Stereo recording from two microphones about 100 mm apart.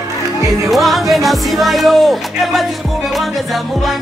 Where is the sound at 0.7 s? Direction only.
Centre (ahead or behind).